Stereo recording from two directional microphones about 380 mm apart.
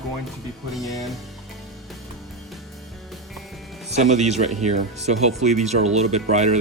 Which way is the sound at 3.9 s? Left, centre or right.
Centre.